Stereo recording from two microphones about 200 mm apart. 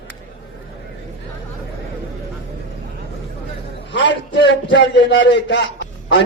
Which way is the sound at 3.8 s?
65° left (ahead or behind).